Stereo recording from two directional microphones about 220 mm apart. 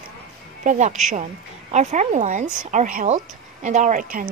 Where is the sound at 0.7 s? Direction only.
30° right (ahead or behind).